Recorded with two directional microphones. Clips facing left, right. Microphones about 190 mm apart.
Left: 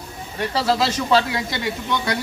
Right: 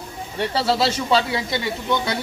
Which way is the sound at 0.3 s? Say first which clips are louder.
Even; 30° right (ahead or behind).